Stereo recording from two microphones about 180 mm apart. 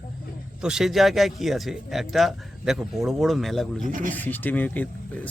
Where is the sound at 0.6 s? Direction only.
5° right (ahead or behind).